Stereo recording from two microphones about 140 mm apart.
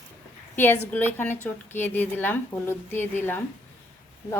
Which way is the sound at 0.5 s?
15° left (ahead or behind).